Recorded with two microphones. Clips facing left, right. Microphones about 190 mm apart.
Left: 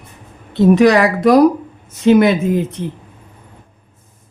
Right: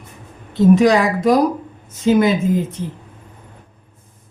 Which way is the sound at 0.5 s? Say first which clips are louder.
Left 2 dB; 70° left (ahead or behind).